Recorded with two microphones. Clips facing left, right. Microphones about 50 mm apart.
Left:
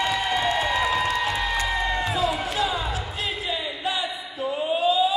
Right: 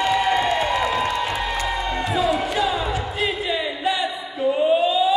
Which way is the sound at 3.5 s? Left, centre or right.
Right.